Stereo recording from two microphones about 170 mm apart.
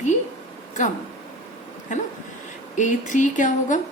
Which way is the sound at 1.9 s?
45° left (ahead or behind).